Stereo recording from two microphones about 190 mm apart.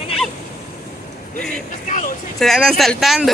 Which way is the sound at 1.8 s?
40° left (ahead or behind).